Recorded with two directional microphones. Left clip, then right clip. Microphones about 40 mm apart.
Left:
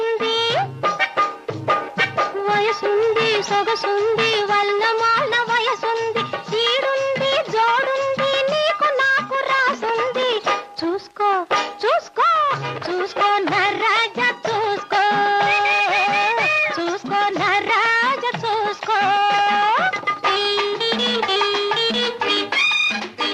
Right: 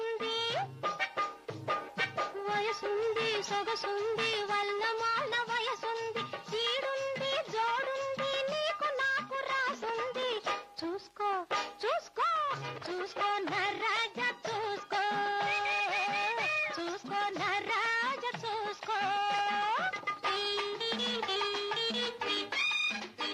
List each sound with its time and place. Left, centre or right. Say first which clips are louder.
0.0 s music: left 14 dB; left